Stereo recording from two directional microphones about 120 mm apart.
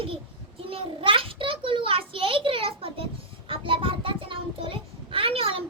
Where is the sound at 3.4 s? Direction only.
45° right (ahead or behind).